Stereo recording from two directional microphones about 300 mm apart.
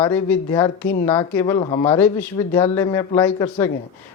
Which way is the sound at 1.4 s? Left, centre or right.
Centre.